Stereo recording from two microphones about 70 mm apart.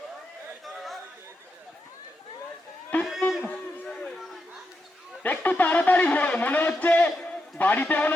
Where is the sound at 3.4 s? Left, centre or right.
Centre.